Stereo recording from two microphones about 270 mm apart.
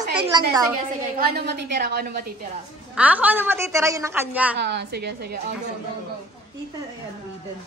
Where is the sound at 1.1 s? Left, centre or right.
Right.